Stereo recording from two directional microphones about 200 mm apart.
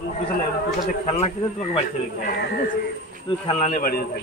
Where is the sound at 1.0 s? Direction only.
35° left (ahead or behind).